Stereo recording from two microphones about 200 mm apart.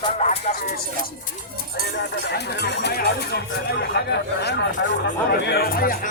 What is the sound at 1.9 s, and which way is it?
Speech, 55° left (ahead or behind).